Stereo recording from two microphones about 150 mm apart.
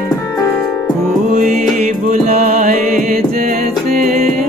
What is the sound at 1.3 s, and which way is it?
Music, 55° right (ahead or behind).